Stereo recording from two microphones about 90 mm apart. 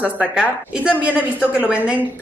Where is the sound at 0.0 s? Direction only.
15° right (ahead or behind).